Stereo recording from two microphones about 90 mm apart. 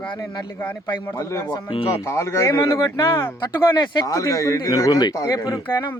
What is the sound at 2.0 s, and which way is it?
Speech, 30° left (ahead or behind).